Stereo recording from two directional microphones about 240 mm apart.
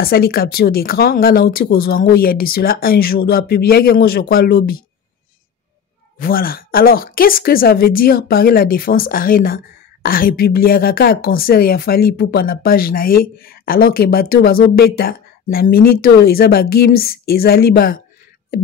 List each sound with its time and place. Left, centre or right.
0.0 s a woman's voice: left
6.1 s a woman's voice: left